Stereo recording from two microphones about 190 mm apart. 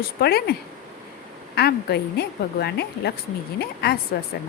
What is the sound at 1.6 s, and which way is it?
A woman's voice, 55° left (ahead or behind).